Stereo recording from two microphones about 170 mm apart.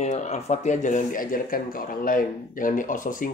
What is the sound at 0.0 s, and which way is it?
Speech, 40° left (ahead or behind).